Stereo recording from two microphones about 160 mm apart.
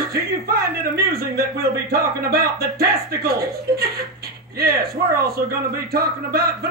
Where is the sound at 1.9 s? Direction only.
70° right (ahead or behind).